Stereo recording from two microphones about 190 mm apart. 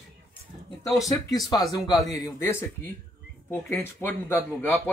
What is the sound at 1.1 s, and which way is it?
Speech, 20° left (ahead or behind).